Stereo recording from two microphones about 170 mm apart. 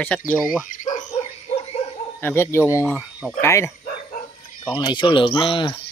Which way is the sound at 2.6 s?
10° right (ahead or behind).